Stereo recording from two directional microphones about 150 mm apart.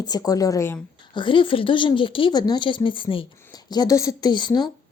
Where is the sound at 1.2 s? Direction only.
35° left (ahead or behind).